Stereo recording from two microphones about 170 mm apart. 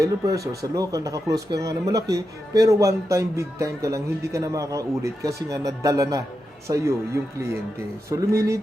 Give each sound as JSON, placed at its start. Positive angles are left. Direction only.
{"t": 0.0, "sound": "speech", "side_deg": -20}